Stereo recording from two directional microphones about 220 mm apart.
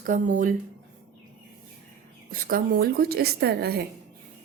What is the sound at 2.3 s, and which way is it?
A woman's voice, 40° right (ahead or behind).